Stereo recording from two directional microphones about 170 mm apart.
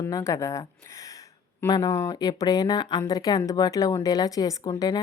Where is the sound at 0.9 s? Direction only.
20° left (ahead or behind).